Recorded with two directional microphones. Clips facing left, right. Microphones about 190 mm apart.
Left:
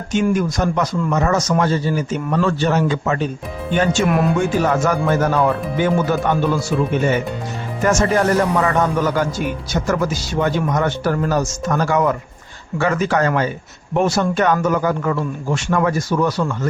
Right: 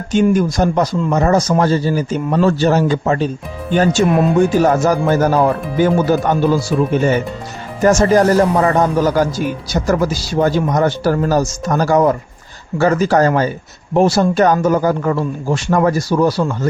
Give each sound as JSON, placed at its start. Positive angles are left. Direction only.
{"t": 0.1, "sound": "speech", "side_deg": -35}